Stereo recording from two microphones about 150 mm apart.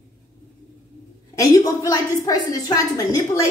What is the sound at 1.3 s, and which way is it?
A woman's voice, 25° left (ahead or behind).